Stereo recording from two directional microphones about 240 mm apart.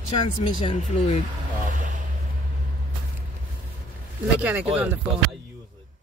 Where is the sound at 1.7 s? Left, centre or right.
Right.